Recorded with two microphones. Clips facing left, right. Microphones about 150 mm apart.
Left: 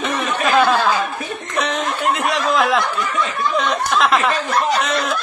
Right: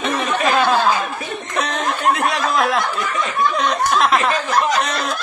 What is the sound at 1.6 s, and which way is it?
Snicker, centre (ahead or behind).